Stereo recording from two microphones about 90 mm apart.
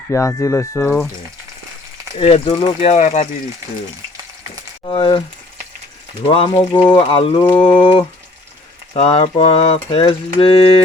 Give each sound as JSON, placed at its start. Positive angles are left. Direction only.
{"t": 0.1, "sound": "speech", "side_deg": 35}
{"t": 2.1, "sound": "speech", "side_deg": 75}
{"t": 4.9, "sound": "speech", "side_deg": 65}
{"t": 6.2, "sound": "speech", "side_deg": 80}
{"t": 8.9, "sound": "a sound", "side_deg": 90}